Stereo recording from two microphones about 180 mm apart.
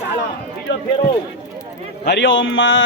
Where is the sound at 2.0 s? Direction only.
75° left (ahead or behind); by 2.8 s 90° left.